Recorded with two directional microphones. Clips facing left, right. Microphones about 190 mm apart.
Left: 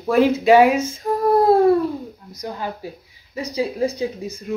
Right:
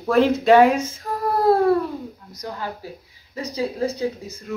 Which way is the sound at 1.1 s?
20° left (ahead or behind).